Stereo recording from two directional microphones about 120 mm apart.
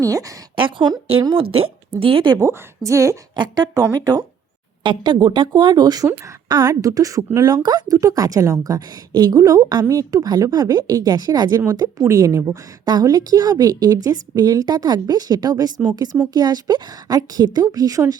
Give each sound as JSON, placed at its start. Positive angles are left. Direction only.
{"t": 0.0, "sound": "a woman's voice", "side_deg": -30}
{"t": 0.5, "sound": "a woman's voice", "side_deg": -45}
{"t": 2.4, "sound": "a woman's voice", "side_deg": -25}
{"t": 3.3, "sound": "a woman's voice", "side_deg": -40}
{"t": 12.8, "sound": "a woman's voice", "side_deg": -35}